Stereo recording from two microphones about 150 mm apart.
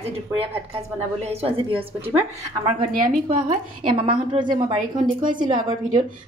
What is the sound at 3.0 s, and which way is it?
Speech, 65° right (ahead or behind).